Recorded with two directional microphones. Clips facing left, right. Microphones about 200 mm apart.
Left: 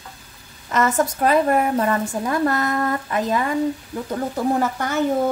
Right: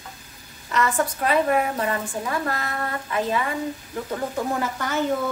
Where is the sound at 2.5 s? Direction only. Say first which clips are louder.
Left 7 dB; 40° left (ahead or behind).